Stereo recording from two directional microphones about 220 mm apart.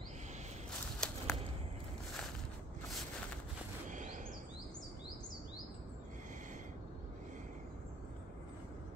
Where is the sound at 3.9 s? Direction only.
35° right (ahead or behind).